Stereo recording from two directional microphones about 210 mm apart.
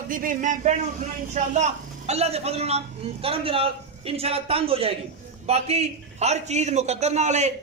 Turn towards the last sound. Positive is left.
turn(degrees=-35)  # may be behind; listen again after turning